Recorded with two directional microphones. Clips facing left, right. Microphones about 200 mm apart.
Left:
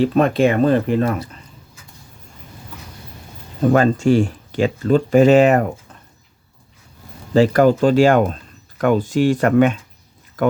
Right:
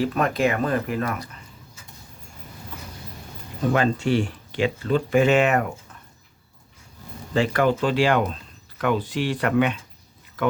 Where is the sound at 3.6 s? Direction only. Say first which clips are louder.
Left 7 dB; 45° left (ahead or behind).